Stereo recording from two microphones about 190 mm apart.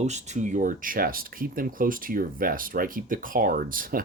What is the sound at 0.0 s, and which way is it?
Speech, 40° right (ahead or behind).